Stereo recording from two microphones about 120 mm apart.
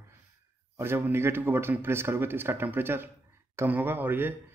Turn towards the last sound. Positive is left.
turn(degrees=-15)  # may be behind; listen again after turning